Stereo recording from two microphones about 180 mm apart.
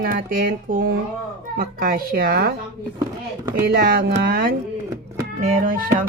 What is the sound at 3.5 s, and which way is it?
Speech, 55° right (ahead or behind).